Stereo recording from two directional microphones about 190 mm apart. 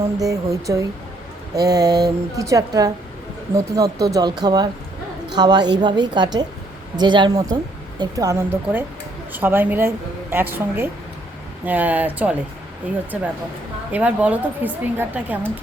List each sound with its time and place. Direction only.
0.2 s a woman's voice: 20° right (ahead or behind)